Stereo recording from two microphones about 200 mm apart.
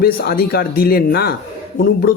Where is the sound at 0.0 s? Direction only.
50° left (ahead or behind).